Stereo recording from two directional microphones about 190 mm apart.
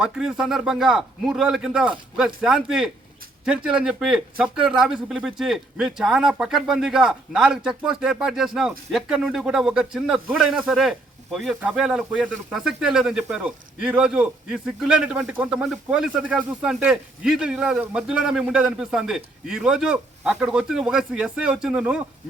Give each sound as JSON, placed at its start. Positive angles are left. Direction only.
{"t": 0.0, "sound": "a man's voice", "side_deg": -5}